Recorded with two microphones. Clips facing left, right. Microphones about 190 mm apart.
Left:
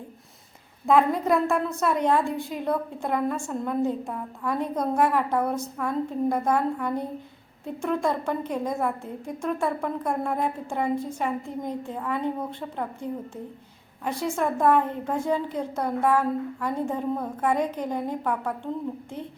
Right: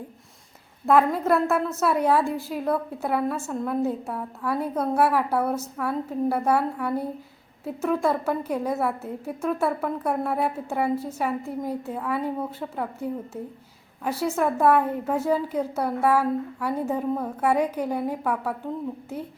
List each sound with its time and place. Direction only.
0.9 s a woman's voice: centre (ahead or behind)